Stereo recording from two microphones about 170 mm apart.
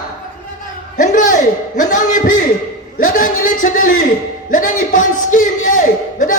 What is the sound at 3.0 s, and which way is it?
A man's voice, 55° left (ahead or behind).